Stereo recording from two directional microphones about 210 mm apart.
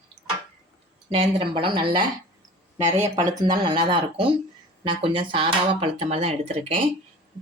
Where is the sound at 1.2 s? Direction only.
25° right (ahead or behind).